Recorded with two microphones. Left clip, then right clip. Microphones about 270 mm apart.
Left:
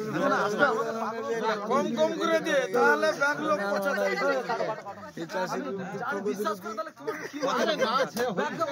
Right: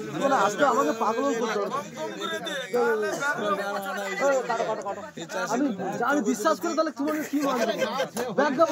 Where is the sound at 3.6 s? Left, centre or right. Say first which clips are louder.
Left 3 dB; left.